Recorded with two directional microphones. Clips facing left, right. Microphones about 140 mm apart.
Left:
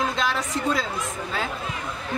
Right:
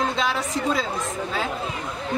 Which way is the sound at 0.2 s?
Centre (ahead or behind).